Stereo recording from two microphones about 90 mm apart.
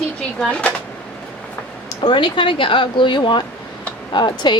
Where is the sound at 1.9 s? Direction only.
60° left (ahead or behind).